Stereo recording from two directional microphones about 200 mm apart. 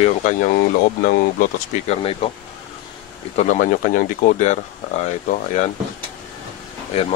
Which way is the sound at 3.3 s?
40° left (ahead or behind).